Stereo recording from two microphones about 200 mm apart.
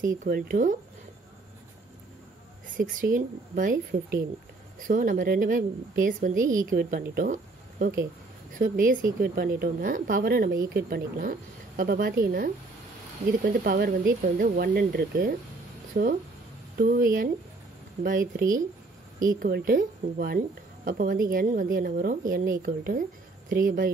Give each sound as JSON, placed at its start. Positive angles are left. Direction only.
{"t": 0.2, "sound": "speech", "side_deg": -45}
{"t": 2.8, "sound": "a woman's voice", "side_deg": -40}
{"t": 8.5, "sound": "a woman's voice", "side_deg": -45}